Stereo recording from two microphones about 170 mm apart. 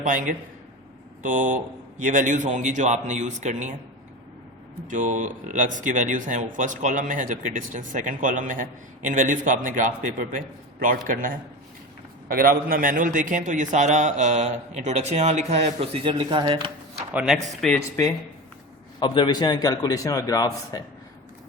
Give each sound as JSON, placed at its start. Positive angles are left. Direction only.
{"t": 0.0, "sound": "a man's voice", "side_deg": -50}
{"t": 4.9, "sound": "a man's voice", "side_deg": -45}
{"t": 17.1, "sound": "speech", "side_deg": -10}
{"t": 17.6, "sound": "speech", "side_deg": 0}
{"t": 18.9, "sound": "a man's voice", "side_deg": 30}